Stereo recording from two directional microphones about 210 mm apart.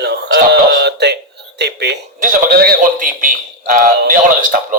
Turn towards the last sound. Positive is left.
turn(degrees=-40)  # may be behind; listen again after turning